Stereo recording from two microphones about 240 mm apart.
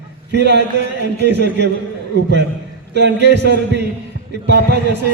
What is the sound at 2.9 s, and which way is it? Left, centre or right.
Speech, right.